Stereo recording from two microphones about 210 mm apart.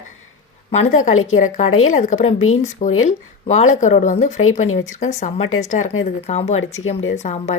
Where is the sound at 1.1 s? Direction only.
80° left.